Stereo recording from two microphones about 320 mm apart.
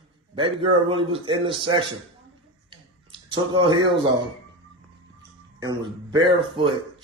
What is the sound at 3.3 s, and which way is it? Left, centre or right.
Speech, centre.